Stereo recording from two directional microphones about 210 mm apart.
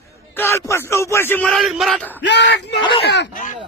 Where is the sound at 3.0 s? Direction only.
55° left (ahead or behind).